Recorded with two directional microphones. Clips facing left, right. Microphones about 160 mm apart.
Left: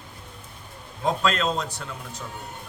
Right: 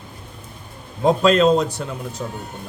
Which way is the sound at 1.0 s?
15° right (ahead or behind).